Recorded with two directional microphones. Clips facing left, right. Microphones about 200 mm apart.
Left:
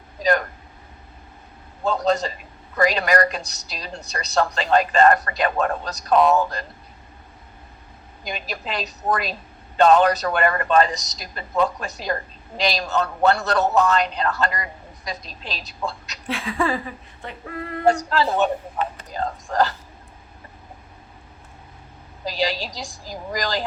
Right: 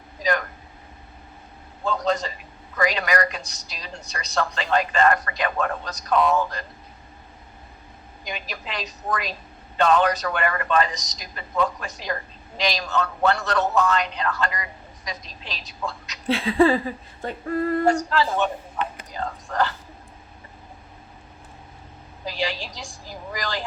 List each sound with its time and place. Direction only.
0.2 s a woman's voice: 35° left (ahead or behind)
1.8 s a woman's voice: 35° left (ahead or behind)
8.3 s a woman's voice: 35° left (ahead or behind)
16.2 s speech: 30° right (ahead or behind)
17.5 s female singing: 45° right (ahead or behind)
17.8 s a woman's voice: 35° left (ahead or behind)
22.2 s a woman's voice: 35° left (ahead or behind)